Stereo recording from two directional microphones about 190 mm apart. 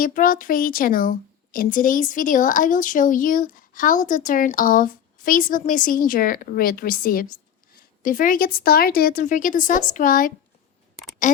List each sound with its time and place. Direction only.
0.0 s speech: 45° left (ahead or behind)